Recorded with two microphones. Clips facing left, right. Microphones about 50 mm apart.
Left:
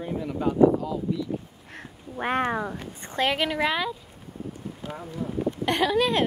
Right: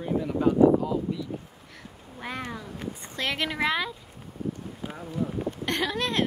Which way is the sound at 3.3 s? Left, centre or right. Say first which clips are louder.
Right 2 dB; centre.